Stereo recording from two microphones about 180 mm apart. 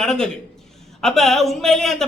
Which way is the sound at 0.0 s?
5° left (ahead or behind).